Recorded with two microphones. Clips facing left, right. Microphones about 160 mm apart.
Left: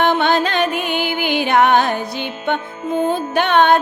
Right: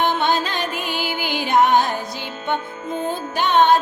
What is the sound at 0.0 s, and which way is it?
Music, 65° left (ahead or behind).